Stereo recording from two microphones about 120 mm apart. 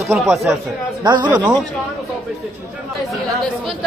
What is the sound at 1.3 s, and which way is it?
Speech, 10° right (ahead or behind).